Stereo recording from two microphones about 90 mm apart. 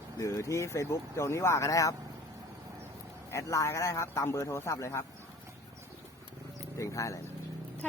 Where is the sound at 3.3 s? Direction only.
35° left (ahead or behind).